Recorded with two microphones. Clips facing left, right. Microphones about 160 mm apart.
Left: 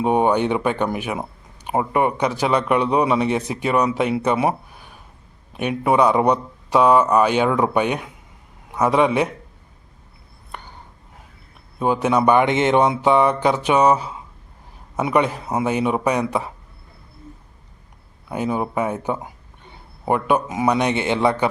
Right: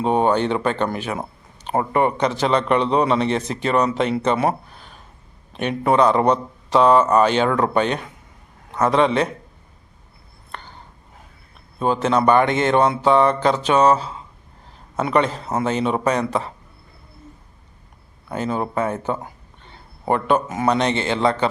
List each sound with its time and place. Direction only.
0.0 s a man's voice: 15° left (ahead or behind)
10.5 s a sound: 15° left (ahead or behind)
11.8 s a man's voice: 15° left (ahead or behind)
18.3 s speech: 15° left (ahead or behind)